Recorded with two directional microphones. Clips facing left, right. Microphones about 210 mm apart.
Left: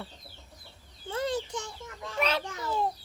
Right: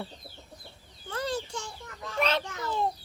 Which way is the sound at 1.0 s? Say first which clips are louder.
Left 2 dB; 25° left (ahead or behind).